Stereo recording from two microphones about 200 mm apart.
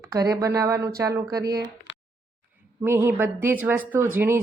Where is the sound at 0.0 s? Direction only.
15° right (ahead or behind).